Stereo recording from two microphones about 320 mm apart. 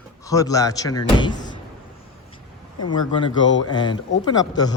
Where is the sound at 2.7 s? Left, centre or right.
Left.